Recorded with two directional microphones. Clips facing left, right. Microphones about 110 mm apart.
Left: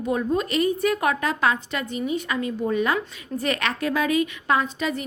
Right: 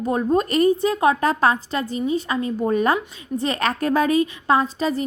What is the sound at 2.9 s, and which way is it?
A woman's voice, 30° right (ahead or behind).